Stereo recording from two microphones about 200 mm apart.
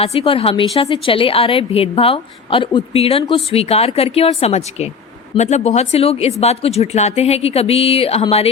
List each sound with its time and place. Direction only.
0.0 s a woman's voice: 30° left (ahead or behind)